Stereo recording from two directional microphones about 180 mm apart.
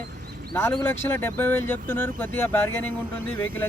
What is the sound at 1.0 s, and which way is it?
Speech, 10° left (ahead or behind).